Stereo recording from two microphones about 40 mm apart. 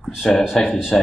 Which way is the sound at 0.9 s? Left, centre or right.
Left.